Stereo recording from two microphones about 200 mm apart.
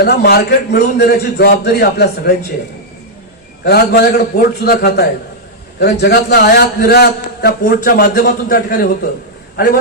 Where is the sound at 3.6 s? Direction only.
55° left (ahead or behind).